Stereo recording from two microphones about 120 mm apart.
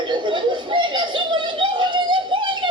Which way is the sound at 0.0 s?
40° right (ahead or behind).